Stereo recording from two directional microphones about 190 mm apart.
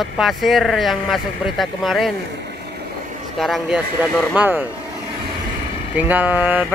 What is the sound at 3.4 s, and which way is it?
Speech, centre (ahead or behind).